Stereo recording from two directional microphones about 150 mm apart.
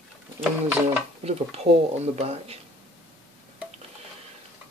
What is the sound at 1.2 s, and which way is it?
Speech, 45° right (ahead or behind).